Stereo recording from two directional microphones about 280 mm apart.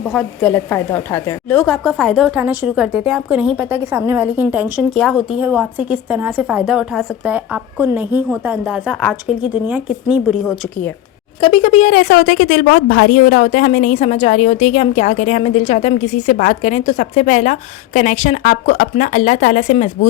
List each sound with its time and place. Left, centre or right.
0.1 s a woman's voice: centre
11.3 s a woman's voice: centre